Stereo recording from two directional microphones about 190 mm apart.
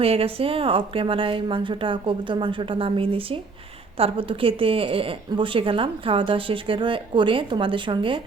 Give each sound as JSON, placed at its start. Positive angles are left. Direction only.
{"t": 0.0, "sound": "a woman's voice", "side_deg": -30}